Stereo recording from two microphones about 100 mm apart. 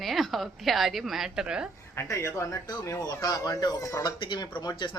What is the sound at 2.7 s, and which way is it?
Speech, 40° left (ahead or behind).